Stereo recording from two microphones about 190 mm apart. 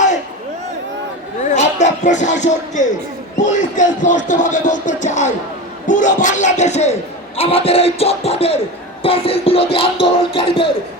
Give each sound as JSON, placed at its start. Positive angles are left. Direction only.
{"t": 1.5, "sound": "speech", "side_deg": 40}
{"t": 3.4, "sound": "music", "side_deg": 40}